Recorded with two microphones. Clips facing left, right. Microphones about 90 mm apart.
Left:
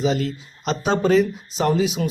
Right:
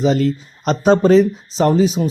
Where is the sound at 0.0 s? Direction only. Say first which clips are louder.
Right 6 dB; 40° right (ahead or behind).